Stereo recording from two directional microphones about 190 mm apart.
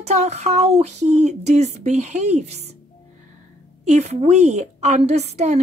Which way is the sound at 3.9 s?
35° right (ahead or behind).